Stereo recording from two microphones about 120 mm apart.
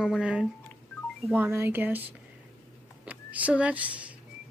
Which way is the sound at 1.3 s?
20° right (ahead or behind).